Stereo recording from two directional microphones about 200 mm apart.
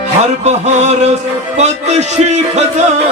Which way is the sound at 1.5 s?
35° right (ahead or behind).